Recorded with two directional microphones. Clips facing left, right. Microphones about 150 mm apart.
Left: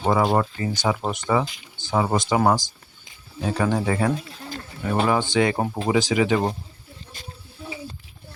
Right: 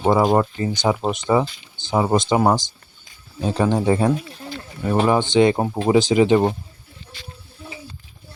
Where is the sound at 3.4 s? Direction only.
20° right (ahead or behind).